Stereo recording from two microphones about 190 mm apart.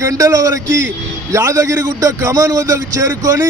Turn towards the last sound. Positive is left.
turn(degrees=-15)  # may be behind; listen again after turning